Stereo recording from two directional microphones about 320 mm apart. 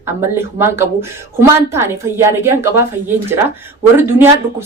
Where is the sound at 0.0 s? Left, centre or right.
Centre.